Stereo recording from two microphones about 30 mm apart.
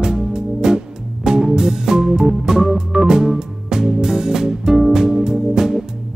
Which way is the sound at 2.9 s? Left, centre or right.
Right.